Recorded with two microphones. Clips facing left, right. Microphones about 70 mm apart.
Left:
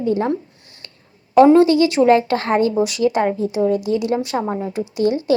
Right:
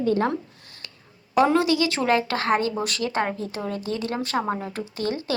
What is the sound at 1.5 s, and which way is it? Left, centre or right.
A woman's voice, left.